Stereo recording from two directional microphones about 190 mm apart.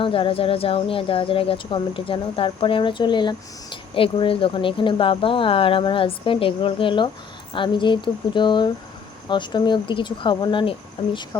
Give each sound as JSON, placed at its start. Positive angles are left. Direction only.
{"t": 0.0, "sound": "speech", "side_deg": 30}